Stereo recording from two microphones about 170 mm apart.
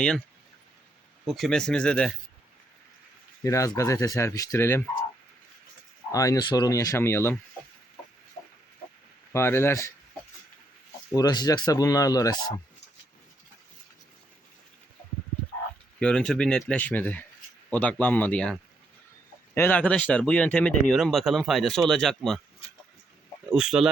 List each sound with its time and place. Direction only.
1.2 s speech: centre (ahead or behind)
3.4 s speech: 20° left (ahead or behind)
6.1 s speech: 20° left (ahead or behind)
9.3 s speech: 15° left (ahead or behind)
11.1 s speech: 20° left (ahead or behind)
16.0 s speech: 5° left (ahead or behind)
19.5 s speech: 10° left (ahead or behind)
23.5 s speech: 5° right (ahead or behind)